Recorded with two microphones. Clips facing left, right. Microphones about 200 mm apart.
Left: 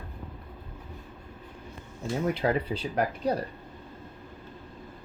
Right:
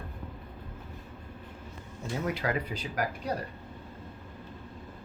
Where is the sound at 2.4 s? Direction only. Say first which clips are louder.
Left 5 dB; 30° left (ahead or behind).